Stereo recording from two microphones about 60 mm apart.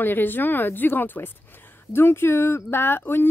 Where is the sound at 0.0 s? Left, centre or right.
Left.